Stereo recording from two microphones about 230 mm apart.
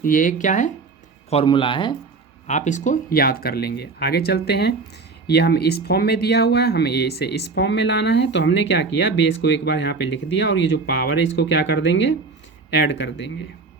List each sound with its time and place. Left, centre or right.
0.0 s speech: left
2.5 s speech: left